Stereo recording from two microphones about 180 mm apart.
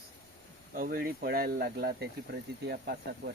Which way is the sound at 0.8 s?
55° right (ahead or behind).